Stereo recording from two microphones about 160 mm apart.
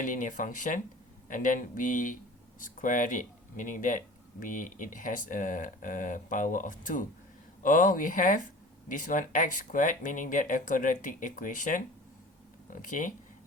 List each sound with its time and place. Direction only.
0.0 s speech: 55° left (ahead or behind)